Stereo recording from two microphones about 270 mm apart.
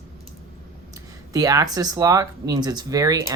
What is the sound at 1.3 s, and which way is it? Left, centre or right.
Speech, centre.